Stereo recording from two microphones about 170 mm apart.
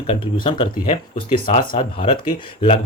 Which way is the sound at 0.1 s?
30° left (ahead or behind).